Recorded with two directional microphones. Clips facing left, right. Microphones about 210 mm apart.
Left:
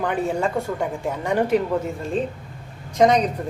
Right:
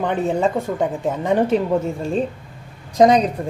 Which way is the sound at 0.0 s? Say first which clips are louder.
Right 3 dB; 25° right (ahead or behind).